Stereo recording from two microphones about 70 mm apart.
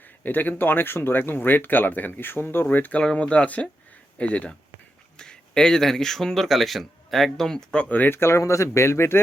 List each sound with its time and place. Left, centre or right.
0.2 s speech: left
3.0 s speech: centre
7.9 s speech: left